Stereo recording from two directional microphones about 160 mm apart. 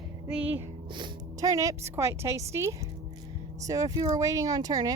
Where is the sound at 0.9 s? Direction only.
30° right (ahead or behind).